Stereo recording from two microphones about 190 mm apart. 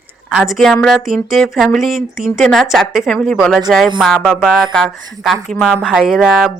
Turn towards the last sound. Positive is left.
turn(degrees=0)  # may be behind; listen again after turning